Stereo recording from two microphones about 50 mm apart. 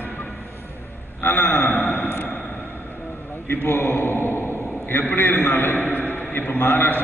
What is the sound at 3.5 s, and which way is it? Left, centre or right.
A man's voice, left.